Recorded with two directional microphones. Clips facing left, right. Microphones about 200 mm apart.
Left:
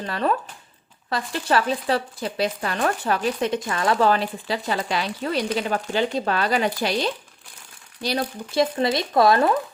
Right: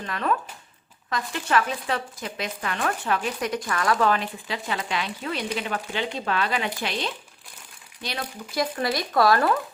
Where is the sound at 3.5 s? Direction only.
25° left (ahead or behind).